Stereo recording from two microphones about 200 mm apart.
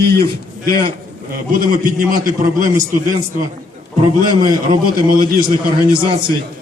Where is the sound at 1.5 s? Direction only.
45° right (ahead or behind).